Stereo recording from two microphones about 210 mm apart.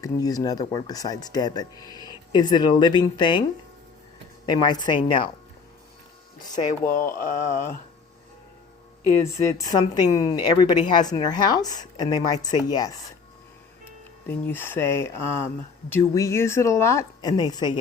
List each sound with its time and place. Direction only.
0.0 s speech: 15° left (ahead or behind)
4.4 s speech: 20° left (ahead or behind)
6.6 s speech: 40° left (ahead or behind)
9.6 s speech: 15° left (ahead or behind)
14.3 s speech: 10° left (ahead or behind)